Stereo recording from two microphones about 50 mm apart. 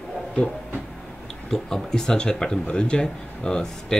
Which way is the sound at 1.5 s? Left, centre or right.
Centre.